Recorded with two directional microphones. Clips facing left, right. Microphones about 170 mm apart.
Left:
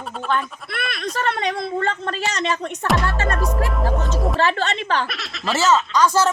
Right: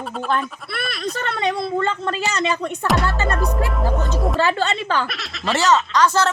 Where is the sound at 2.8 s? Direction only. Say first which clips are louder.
Even; 5° right (ahead or behind).